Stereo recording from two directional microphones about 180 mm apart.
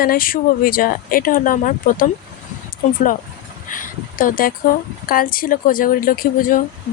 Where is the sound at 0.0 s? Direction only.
55° left (ahead or behind).